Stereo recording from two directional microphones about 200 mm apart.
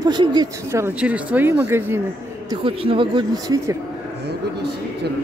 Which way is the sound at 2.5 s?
25° right (ahead or behind).